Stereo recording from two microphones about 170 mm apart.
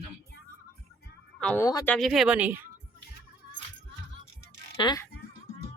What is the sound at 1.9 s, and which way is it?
Speech, centre (ahead or behind).